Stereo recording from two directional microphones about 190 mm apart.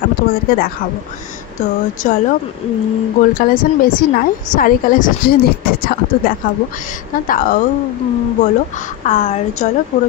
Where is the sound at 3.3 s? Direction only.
50° left (ahead or behind).